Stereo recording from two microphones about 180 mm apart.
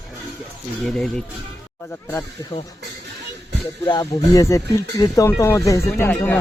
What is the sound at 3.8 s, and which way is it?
Speech, 20° left (ahead or behind).